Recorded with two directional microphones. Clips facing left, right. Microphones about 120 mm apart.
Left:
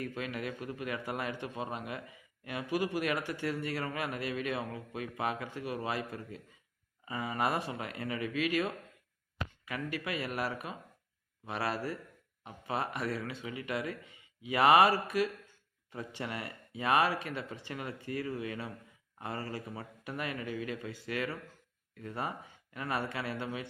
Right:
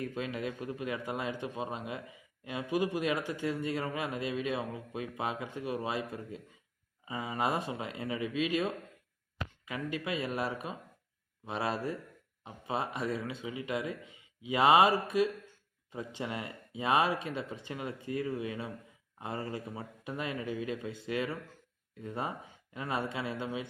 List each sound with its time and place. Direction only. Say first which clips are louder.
0.0 s a man's voice: right 2 dB; 20° right (ahead or behind)